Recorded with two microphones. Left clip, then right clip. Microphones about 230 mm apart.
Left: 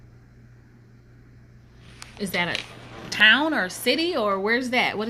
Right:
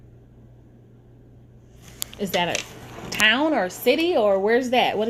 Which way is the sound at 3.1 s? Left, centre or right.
Left.